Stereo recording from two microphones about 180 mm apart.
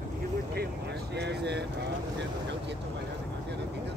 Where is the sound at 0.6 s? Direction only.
70° right (ahead or behind).